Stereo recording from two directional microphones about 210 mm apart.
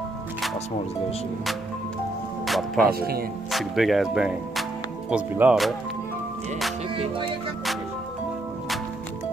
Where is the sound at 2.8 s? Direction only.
45° right (ahead or behind).